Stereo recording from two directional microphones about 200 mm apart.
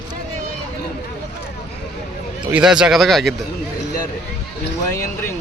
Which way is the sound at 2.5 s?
5° right (ahead or behind).